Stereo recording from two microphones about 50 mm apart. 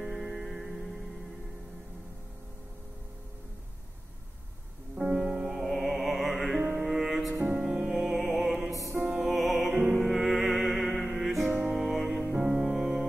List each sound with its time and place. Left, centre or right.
0.0 s music: centre
4.9 s music: centre
7.3 s music: centre
7.9 s music: centre
9.0 s music: centre
9.3 s music: centre